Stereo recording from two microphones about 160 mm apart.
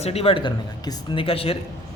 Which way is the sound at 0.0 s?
40° left (ahead or behind).